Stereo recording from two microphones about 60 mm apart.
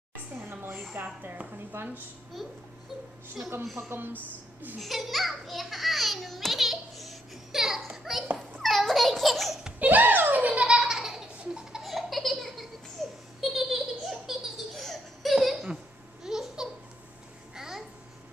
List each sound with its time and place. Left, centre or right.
0.5 s a sound: right
1.0 s a woman's voice: right
1.7 s a woman's voice: right
3.6 s a woman's voice: centre
3.9 s a woman's voice: right
4.7 s a child's voice: centre
8.5 s a child's voice: centre
9.8 s a sound: right
10.8 s baby laughter: centre
16.3 s babbling: centre